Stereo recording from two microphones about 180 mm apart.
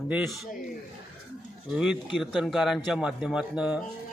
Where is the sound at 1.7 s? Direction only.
Centre (ahead or behind).